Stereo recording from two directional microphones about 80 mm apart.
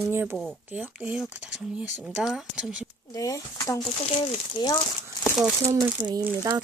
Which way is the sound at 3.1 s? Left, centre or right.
Left.